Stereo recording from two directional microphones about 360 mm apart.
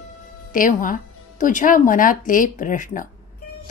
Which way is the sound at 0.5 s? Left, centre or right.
Left.